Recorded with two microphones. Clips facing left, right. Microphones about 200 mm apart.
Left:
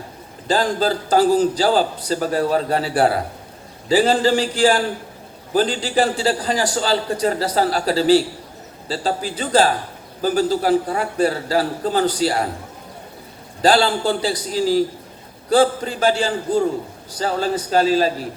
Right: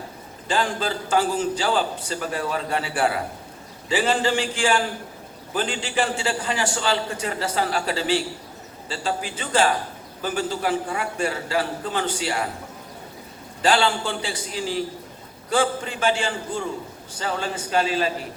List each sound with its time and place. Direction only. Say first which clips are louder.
0.4 s a man's voice: left 6 dB; 35° left (ahead or behind)
13.6 s a man's voice: left 5 dB; 35° left (ahead or behind)